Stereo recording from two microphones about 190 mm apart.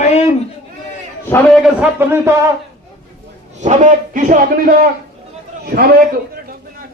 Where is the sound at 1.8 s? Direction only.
10° right (ahead or behind).